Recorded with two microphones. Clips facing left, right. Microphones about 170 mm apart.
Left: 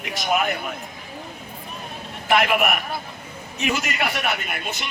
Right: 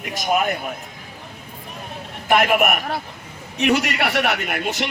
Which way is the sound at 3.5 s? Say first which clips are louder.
Right 6 dB; 65° right (ahead or behind).